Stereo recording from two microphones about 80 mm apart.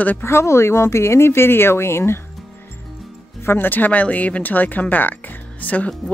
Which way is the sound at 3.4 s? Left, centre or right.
Left.